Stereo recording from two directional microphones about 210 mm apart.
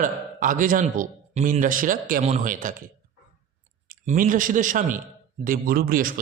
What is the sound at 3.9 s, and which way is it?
Speech, 40° right (ahead or behind).